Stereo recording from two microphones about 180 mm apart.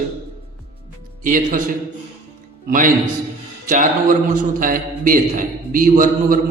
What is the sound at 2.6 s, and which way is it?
A man's voice, 50° right (ahead or behind).